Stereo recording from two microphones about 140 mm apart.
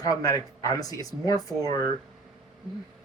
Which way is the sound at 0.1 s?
25° left (ahead or behind).